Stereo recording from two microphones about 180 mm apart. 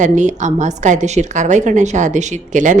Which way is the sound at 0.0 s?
45° right (ahead or behind).